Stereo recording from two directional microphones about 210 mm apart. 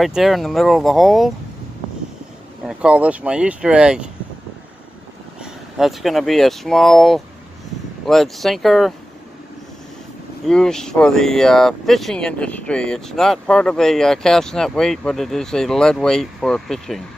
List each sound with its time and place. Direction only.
0.0 s speech: centre (ahead or behind)
2.6 s speech: 5° right (ahead or behind)
5.4 s speech: centre (ahead or behind)
10.4 s speech: centre (ahead or behind)